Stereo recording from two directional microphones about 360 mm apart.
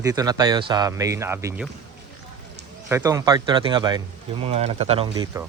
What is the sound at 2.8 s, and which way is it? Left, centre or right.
Speech, centre.